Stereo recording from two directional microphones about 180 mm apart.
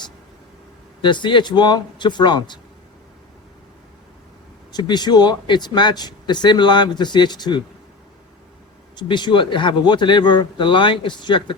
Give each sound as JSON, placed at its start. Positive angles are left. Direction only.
{"t": 1.0, "sound": "speech", "side_deg": 25}
{"t": 4.7, "sound": "speech", "side_deg": 20}
{"t": 9.0, "sound": "speech", "side_deg": 25}